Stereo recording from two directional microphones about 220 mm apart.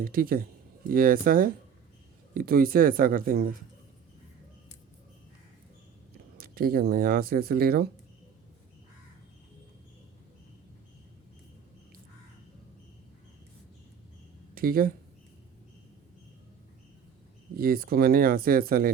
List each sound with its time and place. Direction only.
0.0 s speech: 40° right (ahead or behind)
6.3 s speech: 45° right (ahead or behind)
14.5 s speech: 40° right (ahead or behind)
17.6 s speech: 40° right (ahead or behind)